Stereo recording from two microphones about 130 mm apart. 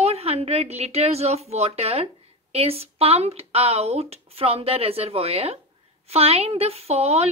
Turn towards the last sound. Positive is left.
turn(degrees=-55)  # may be behind; listen again after turning